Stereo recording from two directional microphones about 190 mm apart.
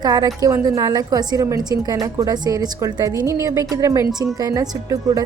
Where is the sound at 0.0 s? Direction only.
20° right (ahead or behind).